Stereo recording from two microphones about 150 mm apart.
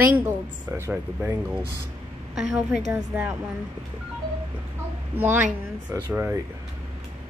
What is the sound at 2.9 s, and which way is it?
Speech, 15° right (ahead or behind).